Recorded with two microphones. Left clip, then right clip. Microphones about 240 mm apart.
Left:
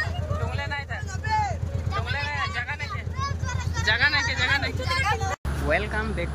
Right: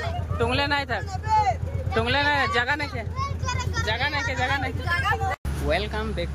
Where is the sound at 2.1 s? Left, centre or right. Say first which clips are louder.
Right 7 dB; right.